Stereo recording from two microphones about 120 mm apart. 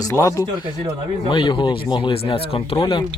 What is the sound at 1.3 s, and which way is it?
Speech, 40° left (ahead or behind).